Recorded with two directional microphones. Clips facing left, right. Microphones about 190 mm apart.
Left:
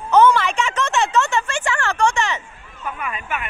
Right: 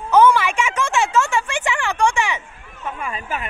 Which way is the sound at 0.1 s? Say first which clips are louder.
Even; 10° right (ahead or behind).